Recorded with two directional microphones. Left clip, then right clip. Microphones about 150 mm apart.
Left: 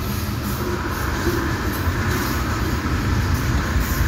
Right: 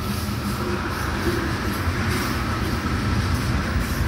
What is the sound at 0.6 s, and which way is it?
Train, 40° right (ahead or behind).